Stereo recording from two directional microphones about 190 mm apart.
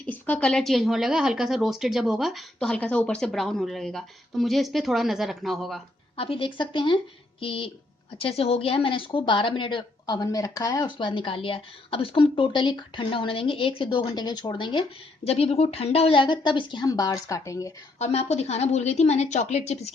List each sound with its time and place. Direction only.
0.1 s a woman's voice: 10° left (ahead or behind)
6.1 s speech: 30° left (ahead or behind)
18.0 s a woman's voice: 35° left (ahead or behind)